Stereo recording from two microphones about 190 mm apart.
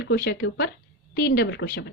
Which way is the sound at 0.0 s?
70° left (ahead or behind).